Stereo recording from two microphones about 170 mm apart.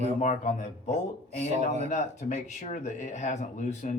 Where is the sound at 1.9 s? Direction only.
45° left (ahead or behind).